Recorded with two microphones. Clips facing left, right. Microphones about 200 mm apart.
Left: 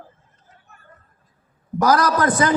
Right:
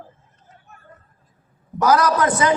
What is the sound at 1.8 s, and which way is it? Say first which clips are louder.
Speech: even; 40° left (ahead or behind).